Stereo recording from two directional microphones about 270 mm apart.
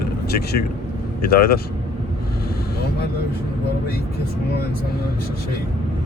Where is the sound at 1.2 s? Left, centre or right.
Left.